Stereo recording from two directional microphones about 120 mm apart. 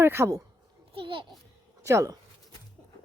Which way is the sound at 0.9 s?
45° right (ahead or behind).